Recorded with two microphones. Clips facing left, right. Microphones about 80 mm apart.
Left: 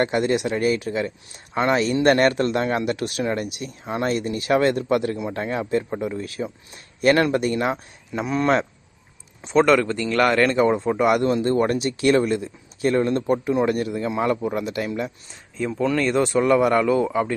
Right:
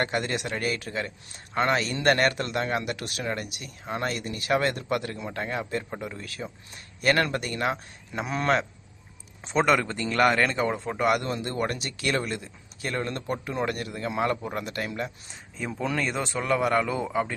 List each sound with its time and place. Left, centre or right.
0.0 s speech: left
1.8 s speech: left
8.1 s a man's voice: centre
9.6 s speech: centre
10.3 s speech: centre
11.0 s speech: left
13.3 s speech: centre
14.1 s speech: centre
15.5 s speech: centre
16.2 s speech: centre